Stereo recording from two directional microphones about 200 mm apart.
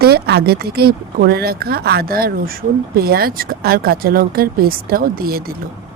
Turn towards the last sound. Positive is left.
turn(degrees=-50)  # may be behind; listen again after turning